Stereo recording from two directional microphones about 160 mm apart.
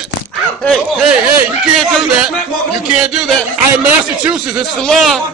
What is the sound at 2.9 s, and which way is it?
A man's voice, 5° right (ahead or behind).